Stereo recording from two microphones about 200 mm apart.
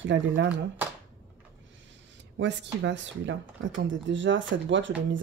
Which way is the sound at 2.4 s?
60° right (ahead or behind).